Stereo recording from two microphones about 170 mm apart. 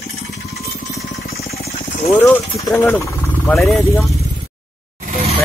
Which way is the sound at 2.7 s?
10° left (ahead or behind).